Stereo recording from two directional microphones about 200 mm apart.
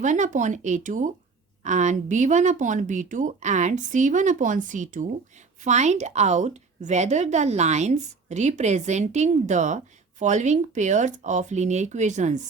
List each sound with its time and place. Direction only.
0.0 s a woman's voice: 40° right (ahead or behind)